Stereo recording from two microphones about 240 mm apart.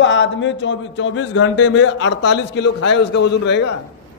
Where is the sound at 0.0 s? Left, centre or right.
Left.